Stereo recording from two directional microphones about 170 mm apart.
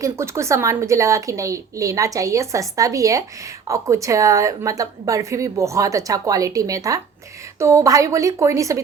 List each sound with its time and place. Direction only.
0.0 s a woman's voice: 15° right (ahead or behind)